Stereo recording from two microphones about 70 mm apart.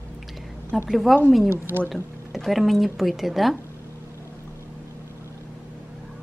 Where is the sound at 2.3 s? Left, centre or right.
Centre.